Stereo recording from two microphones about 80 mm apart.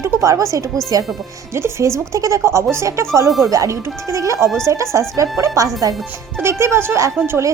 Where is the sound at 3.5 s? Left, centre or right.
Right.